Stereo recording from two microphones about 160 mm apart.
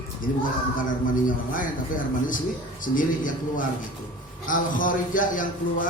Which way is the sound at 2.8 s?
60° left (ahead or behind).